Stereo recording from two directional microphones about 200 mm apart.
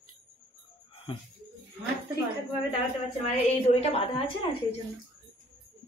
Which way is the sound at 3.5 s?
30° left (ahead or behind).